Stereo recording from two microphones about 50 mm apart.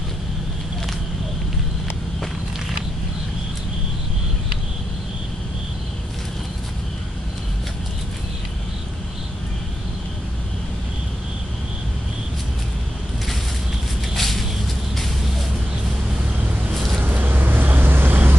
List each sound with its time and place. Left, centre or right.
14.1 s a sound: centre
16.7 s vehicle: centre
17.0 s vehicle: right